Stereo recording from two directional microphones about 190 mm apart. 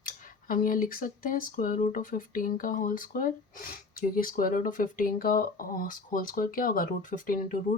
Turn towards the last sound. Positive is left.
turn(degrees=45)  # may be behind; listen again after turning